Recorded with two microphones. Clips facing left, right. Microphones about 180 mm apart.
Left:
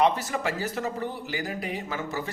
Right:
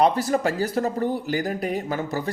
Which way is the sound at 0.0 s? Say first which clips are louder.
Right 4 dB; 35° right (ahead or behind).